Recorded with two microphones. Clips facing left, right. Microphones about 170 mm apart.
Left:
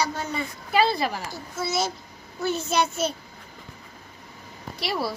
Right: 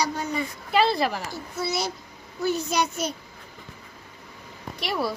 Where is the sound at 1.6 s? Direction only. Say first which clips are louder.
Left 2 dB; 20° left (ahead or behind).